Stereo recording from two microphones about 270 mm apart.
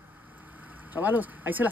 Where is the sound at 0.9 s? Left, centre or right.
Centre.